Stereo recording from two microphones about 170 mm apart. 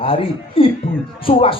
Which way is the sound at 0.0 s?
35° left (ahead or behind).